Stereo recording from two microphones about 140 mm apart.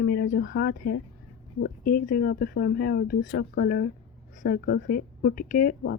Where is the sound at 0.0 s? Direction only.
90° left.